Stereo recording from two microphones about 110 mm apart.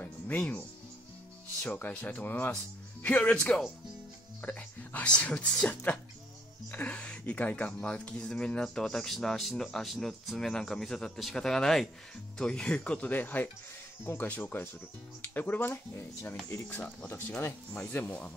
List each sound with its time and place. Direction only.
0.0 s music: 15° left (ahead or behind)
1.6 s speech: 15° left (ahead or behind)
4.4 s speech: 15° left (ahead or behind)